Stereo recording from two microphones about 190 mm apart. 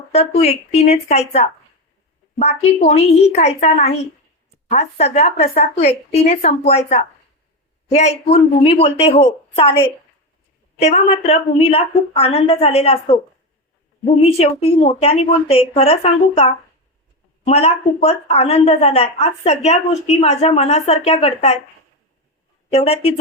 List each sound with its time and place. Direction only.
0.1 s a woman's voice: 35° left (ahead or behind)
14.2 s a woman's voice: 30° left (ahead or behind)
22.7 s a woman's voice: 30° left (ahead or behind)